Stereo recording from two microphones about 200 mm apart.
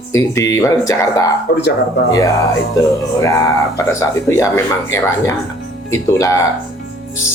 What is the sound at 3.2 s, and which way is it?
Speech, 15° left (ahead or behind).